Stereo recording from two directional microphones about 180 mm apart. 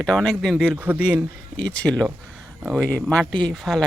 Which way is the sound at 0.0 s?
5° left (ahead or behind).